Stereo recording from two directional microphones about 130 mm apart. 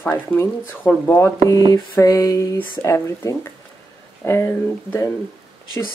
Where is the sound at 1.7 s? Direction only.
25° left (ahead or behind).